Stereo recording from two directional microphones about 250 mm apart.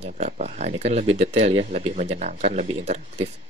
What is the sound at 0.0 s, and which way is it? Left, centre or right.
Speech, right.